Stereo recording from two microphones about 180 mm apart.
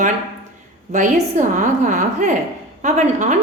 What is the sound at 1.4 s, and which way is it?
A woman's voice, 45° right (ahead or behind).